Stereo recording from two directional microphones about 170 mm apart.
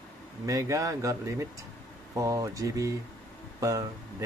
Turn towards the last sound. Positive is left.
turn(degrees=-20)  # may be behind; listen again after turning